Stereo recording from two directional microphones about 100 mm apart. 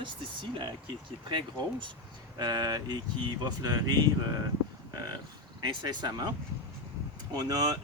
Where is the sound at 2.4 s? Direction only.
45° right (ahead or behind).